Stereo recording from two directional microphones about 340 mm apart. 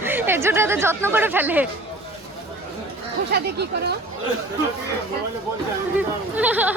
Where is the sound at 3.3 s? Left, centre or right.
Right.